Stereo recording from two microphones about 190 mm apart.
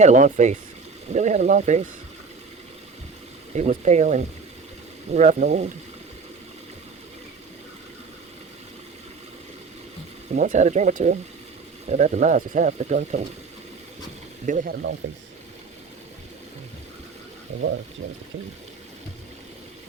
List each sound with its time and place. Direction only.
0.0 s speech: 40° right (ahead or behind)
3.5 s speech: 40° right (ahead or behind)
10.3 s speech: 40° right (ahead or behind)
14.4 s speech: 45° right (ahead or behind)